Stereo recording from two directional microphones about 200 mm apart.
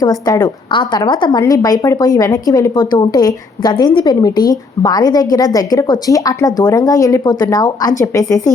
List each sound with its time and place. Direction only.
0.0 s a woman's voice: 20° left (ahead or behind)